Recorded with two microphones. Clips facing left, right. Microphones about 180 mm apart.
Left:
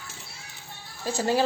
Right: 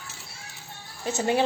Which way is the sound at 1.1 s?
20° right (ahead or behind).